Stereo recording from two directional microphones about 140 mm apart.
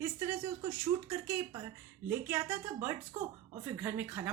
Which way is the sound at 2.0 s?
15° right (ahead or behind).